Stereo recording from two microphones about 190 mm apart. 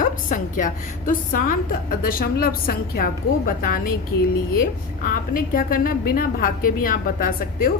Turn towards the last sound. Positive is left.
turn(degrees=50)  # may be behind; listen again after turning